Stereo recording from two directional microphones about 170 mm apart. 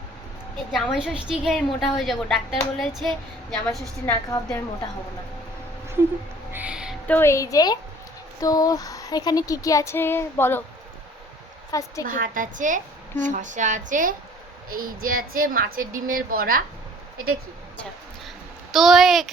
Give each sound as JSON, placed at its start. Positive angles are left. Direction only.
{"t": 0.7, "sound": "a woman's voice", "side_deg": -5}
{"t": 4.0, "sound": "a woman's voice", "side_deg": 15}
{"t": 6.5, "sound": "music", "side_deg": -5}
{"t": 7.1, "sound": "speech", "side_deg": 15}
{"t": 11.7, "sound": "speech", "side_deg": 20}
{"t": 12.0, "sound": "a woman's voice", "side_deg": -55}
{"t": 18.7, "sound": "a woman's voice", "side_deg": 0}